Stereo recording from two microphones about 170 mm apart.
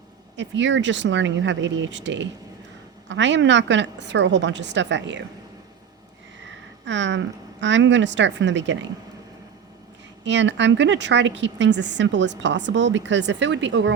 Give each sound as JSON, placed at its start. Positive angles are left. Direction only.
{"t": 0.3, "sound": "speech", "side_deg": -90}
{"t": 6.8, "sound": "speech", "side_deg": -90}
{"t": 10.2, "sound": "speech", "side_deg": -90}